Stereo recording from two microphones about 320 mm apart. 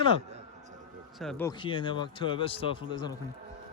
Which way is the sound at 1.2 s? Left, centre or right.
Centre.